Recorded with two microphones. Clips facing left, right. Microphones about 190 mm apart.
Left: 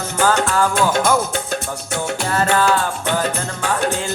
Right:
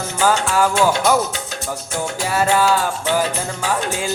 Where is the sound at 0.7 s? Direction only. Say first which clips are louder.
Right 1 dB; 50° left (ahead or behind).